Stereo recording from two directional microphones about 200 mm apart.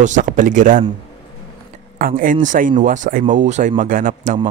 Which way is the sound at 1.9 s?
45° right (ahead or behind).